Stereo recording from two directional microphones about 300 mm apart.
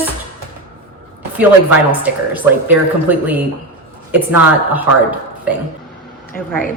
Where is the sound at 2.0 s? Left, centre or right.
Centre.